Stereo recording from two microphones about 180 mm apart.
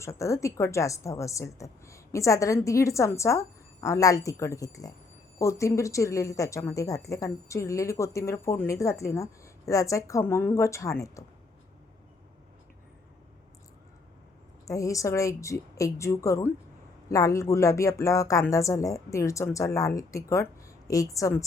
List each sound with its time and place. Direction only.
0.0 s a woman's voice: 15° left (ahead or behind)
14.7 s a woman's voice: 20° left (ahead or behind)